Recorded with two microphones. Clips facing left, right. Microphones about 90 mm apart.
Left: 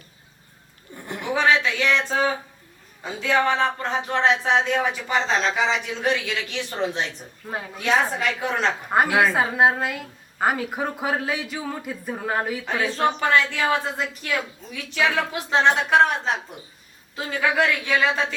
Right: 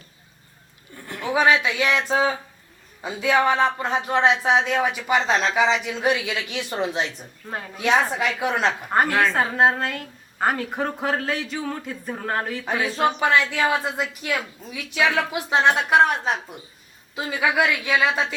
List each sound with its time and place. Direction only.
0.9 s a sound: 20° left (ahead or behind)
1.3 s speech: 10° right (ahead or behind)
7.4 s a woman's voice: 5° left (ahead or behind)
8.4 s speech: 10° right (ahead or behind)
8.9 s a woman's voice: 5° left (ahead or behind)
12.6 s a woman's voice: 5° right (ahead or behind)